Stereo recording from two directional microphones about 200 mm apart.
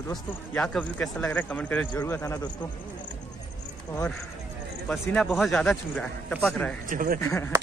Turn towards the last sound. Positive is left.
turn(degrees=15)  # may be behind; listen again after turning